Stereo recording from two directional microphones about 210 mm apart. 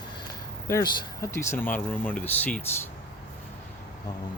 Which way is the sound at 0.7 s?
15° left (ahead or behind).